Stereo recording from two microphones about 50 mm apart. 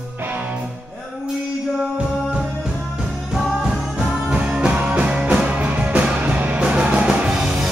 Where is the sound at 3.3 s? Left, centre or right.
Centre.